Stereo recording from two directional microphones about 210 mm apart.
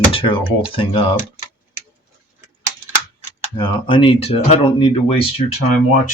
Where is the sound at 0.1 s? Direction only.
25° left (ahead or behind).